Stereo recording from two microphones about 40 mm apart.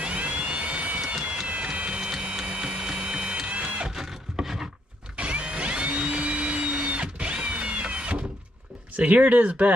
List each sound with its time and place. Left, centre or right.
0.0 s vehicle: right
1.5 s music: right
3.9 s wood: centre
5.1 s vacuum cleaner: right
8.9 s speech: right